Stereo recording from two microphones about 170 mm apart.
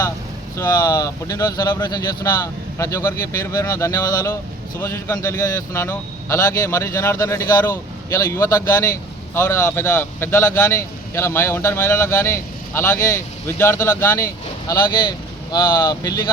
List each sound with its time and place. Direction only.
0.5 s speech: 20° left (ahead or behind)